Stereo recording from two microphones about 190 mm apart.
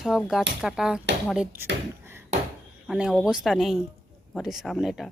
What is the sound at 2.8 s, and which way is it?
Speech, 5° right (ahead or behind).